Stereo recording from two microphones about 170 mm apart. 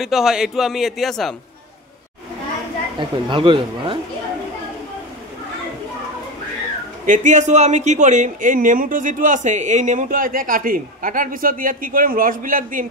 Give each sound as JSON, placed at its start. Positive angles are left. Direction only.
{"t": 0.0, "sound": "a man's voice", "side_deg": 0}
{"t": 3.0, "sound": "speech", "side_deg": -30}
{"t": 7.1, "sound": "speech", "side_deg": -45}